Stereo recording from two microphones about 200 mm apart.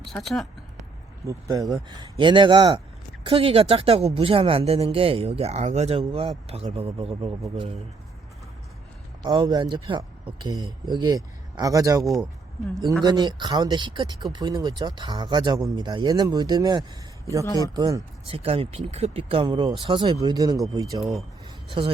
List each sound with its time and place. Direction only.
0.0 s speech: centre (ahead or behind)
1.3 s speech: 15° right (ahead or behind)
9.2 s speech: 20° right (ahead or behind)
17.4 s speech: 15° left (ahead or behind)
17.7 s speech: 20° right (ahead or behind)
21.0 s speech: centre (ahead or behind)